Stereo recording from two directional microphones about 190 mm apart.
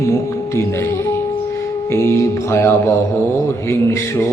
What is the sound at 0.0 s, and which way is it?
Music, 15° left (ahead or behind).